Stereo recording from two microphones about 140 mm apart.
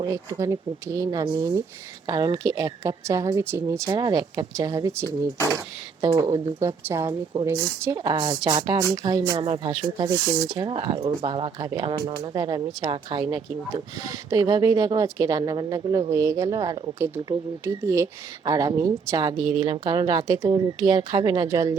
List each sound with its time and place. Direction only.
0.0 s speech: 20° right (ahead or behind)
7.4 s speech: 20° right (ahead or behind)